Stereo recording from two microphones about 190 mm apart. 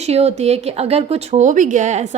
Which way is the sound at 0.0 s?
35° right (ahead or behind).